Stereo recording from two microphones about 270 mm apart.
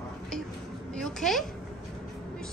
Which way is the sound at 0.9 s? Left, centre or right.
Centre.